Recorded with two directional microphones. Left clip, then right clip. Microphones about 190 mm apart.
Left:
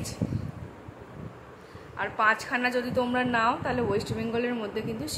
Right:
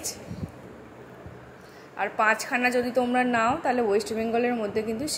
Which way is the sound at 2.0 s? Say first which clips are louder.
Right 1 dB; 15° right (ahead or behind).